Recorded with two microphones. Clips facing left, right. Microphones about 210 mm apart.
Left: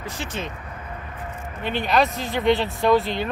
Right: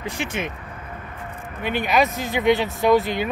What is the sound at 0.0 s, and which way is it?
Speech, 15° right (ahead or behind).